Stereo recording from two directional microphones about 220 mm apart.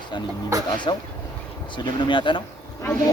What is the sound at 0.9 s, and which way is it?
A woman's voice, 20° left (ahead or behind).